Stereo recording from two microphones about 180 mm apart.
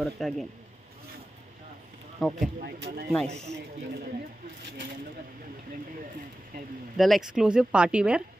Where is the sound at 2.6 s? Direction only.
65° right (ahead or behind).